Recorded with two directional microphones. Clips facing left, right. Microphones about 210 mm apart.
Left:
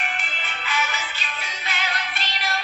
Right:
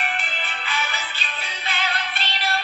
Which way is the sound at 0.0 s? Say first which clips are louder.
Right 3 dB; 35° right (ahead or behind).